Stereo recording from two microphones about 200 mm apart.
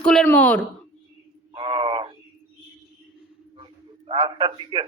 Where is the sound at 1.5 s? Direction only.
25° right (ahead or behind).